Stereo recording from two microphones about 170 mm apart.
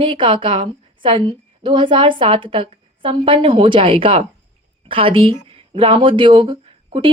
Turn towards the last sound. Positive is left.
turn(degrees=-35)  # may be behind; listen again after turning